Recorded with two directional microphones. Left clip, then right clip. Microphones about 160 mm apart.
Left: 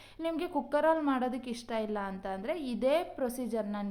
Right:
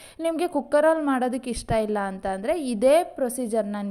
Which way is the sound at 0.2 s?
40° right (ahead or behind).